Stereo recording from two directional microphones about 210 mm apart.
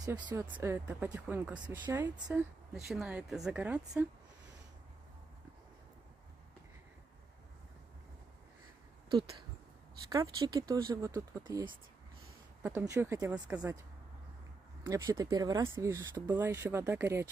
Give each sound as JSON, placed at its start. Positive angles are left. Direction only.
{"t": 0.0, "sound": "speech", "side_deg": -15}
{"t": 2.7, "sound": "a woman's voice", "side_deg": 0}
{"t": 10.1, "sound": "speech", "side_deg": -15}
{"t": 14.8, "sound": "speech", "side_deg": -15}